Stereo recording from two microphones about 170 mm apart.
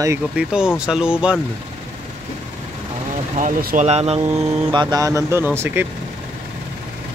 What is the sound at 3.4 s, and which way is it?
Speech, 55° right (ahead or behind).